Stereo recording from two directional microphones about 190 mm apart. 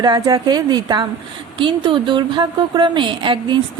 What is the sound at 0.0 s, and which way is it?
A woman's voice, 20° right (ahead or behind).